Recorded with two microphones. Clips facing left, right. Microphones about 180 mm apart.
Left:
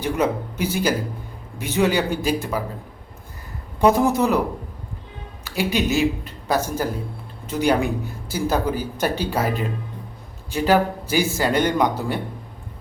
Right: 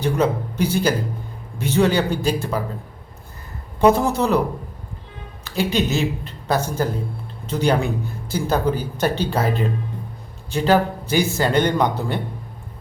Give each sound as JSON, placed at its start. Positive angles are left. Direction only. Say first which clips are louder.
{"t": 0.0, "sound": "speech", "louder": "right 2 dB", "side_deg": 10}
{"t": 3.8, "sound": "speech", "louder": "right 1 dB", "side_deg": 10}
{"t": 5.5, "sound": "speech", "louder": "right 1 dB", "side_deg": 10}